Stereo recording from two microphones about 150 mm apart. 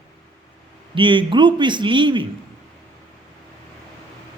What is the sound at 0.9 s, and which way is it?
A man's voice, 35° right (ahead or behind).